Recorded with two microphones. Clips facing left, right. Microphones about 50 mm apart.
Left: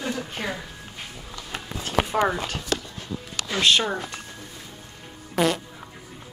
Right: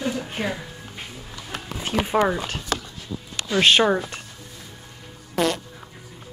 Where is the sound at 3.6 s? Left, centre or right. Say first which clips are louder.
Right 4 dB; right.